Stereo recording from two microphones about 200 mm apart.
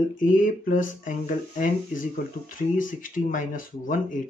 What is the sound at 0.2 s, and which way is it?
Speech, 40° left (ahead or behind).